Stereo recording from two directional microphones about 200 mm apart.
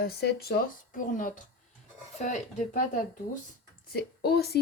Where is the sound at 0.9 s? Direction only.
40° left (ahead or behind).